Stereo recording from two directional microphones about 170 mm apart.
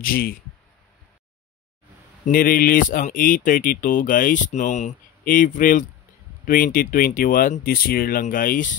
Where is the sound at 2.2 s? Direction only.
55° left (ahead or behind).